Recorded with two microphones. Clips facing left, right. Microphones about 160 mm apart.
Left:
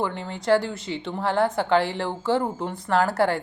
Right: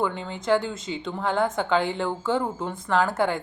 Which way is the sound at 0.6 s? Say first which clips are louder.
Left 1 dB; 65° left (ahead or behind).